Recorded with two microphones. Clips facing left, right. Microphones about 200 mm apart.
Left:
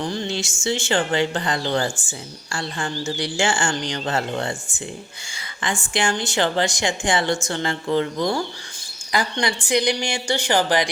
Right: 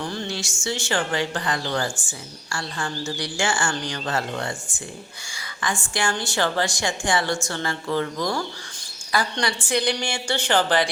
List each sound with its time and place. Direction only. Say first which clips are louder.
0.0 s a woman's voice: left 4 dB; 20° left (ahead or behind)